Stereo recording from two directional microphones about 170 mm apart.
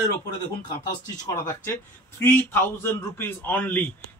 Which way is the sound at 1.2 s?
20° left (ahead or behind).